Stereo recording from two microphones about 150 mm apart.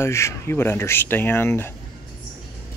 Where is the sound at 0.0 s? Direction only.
20° left (ahead or behind).